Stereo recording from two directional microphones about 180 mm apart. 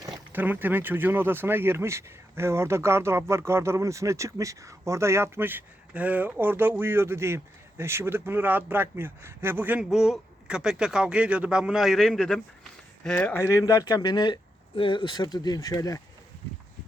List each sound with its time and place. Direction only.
0.3 s speech: 10° right (ahead or behind); by 16.0 s 20° left (ahead or behind)